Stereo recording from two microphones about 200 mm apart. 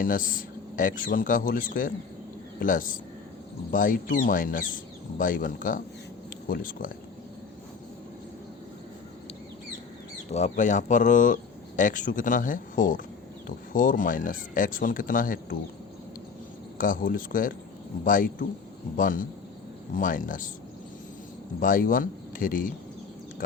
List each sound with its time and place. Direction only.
0.0 s speech: 45° left (ahead or behind)
10.3 s speech: 35° left (ahead or behind)
16.7 s speech: 45° left (ahead or behind)
21.6 s speech: 45° left (ahead or behind)